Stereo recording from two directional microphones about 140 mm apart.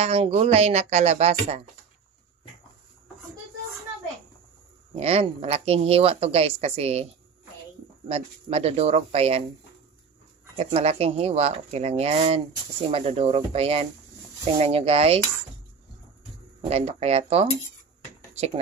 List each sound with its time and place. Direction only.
0.0 s speech: 45° right (ahead or behind)
4.9 s speech: 45° right (ahead or behind)
8.1 s speech: 50° right (ahead or behind)
10.5 s speech: 45° right (ahead or behind)
16.6 s speech: 45° right (ahead or behind)